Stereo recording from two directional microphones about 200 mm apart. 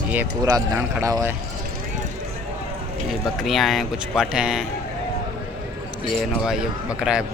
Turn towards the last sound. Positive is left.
turn(degrees=-5)  # may be behind; listen again after turning